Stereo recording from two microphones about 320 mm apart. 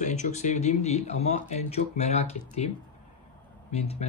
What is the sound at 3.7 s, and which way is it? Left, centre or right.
Speech, centre.